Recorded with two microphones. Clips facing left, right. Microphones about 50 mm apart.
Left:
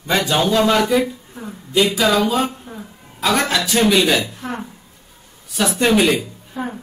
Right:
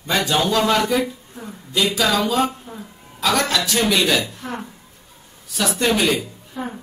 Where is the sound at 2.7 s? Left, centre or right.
Left.